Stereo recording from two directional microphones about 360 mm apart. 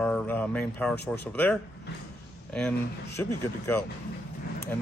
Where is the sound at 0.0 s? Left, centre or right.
Centre.